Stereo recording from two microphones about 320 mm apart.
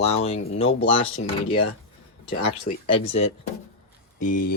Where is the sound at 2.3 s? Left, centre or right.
Left.